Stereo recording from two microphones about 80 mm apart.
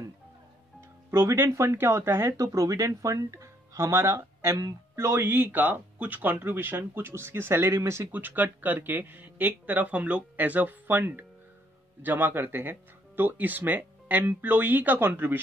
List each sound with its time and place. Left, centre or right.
0.7 s speech: right
2.3 s speech: right
8.1 s speech: right